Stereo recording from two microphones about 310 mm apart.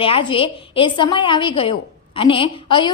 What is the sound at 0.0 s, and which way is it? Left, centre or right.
A woman's voice, centre.